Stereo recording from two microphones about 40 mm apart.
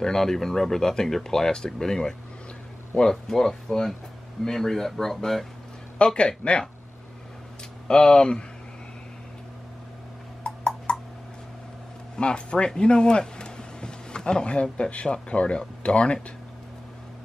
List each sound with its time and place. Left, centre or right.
0.0 s speech: centre
5.9 s speech: left
7.9 s speech: left
10.4 s a sound: left
12.2 s speech: left